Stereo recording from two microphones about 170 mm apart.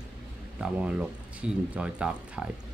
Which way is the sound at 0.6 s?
5° right (ahead or behind).